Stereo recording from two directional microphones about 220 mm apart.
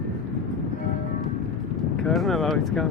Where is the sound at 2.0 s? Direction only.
Centre (ahead or behind).